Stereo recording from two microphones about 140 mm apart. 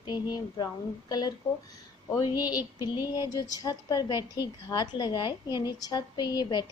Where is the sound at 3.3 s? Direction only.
25° left (ahead or behind).